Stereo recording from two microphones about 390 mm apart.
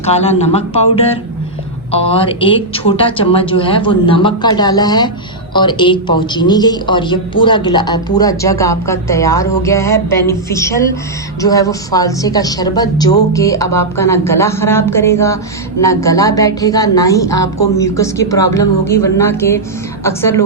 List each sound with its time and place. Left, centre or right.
0.0 s a man's voice: centre